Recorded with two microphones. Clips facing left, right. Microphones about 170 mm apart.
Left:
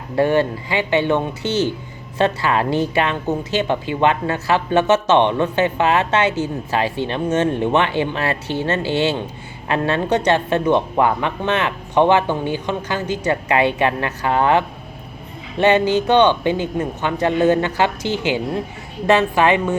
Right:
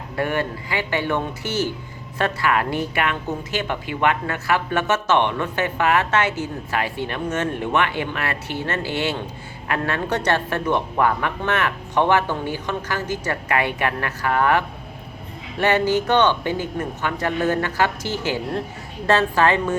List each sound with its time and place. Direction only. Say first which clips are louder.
0.2 s a woman's voice: left 7 dB; 25° left (ahead or behind)